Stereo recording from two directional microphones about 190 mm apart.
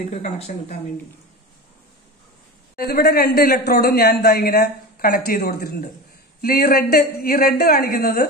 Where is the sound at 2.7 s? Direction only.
55° left (ahead or behind).